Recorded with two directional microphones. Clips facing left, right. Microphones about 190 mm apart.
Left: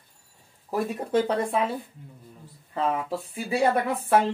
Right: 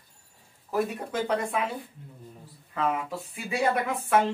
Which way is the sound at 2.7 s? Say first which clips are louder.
Left 2 dB; 30° left (ahead or behind).